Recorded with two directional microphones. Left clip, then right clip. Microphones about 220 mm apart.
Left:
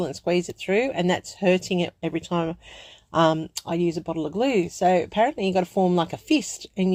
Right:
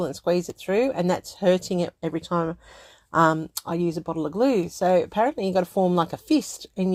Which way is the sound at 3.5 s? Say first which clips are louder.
Left 1 dB; 25° right (ahead or behind).